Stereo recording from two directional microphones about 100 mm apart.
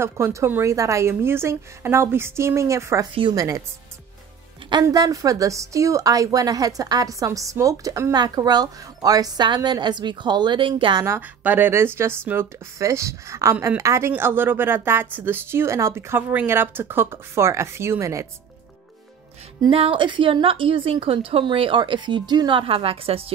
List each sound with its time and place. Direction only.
0.0 s a woman's voice: 25° right (ahead or behind)
4.8 s a woman's voice: 35° right (ahead or behind); by 11.0 s 55° right (ahead or behind)
11.1 s speech: 20° right (ahead or behind)
19.7 s a woman's voice: 65° right (ahead or behind)